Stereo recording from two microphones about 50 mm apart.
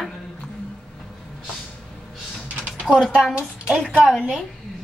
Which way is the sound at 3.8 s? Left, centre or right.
Right.